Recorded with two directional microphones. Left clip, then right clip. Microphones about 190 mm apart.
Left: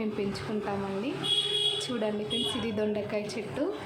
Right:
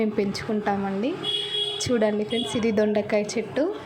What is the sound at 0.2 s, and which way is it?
A woman's voice, 25° right (ahead or behind).